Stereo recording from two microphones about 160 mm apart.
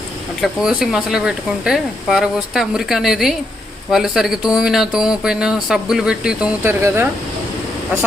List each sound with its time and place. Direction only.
0.4 s speech: 5° right (ahead or behind)
6.6 s speech: 15° right (ahead or behind)